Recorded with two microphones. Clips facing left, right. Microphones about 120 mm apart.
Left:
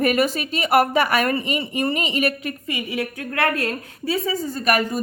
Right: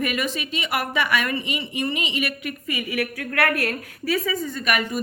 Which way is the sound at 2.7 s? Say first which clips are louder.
Right 1 dB; 25° left (ahead or behind).